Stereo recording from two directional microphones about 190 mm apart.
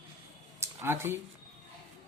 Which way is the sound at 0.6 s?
15° right (ahead or behind).